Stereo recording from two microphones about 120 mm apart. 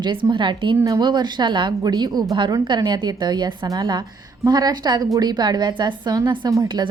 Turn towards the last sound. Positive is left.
turn(degrees=-35)  # may be behind; listen again after turning